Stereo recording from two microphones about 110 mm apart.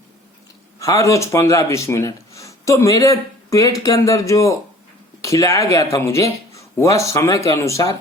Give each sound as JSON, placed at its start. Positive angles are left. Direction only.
{"t": 0.8, "sound": "speech", "side_deg": 30}